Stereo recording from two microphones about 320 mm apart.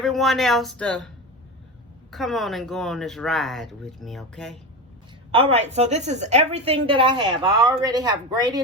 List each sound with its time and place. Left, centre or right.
0.0 s speech: centre
2.0 s speech: centre
5.3 s a woman's voice: centre